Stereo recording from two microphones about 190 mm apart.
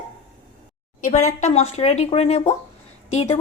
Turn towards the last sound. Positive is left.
turn(degrees=35)  # may be behind; listen again after turning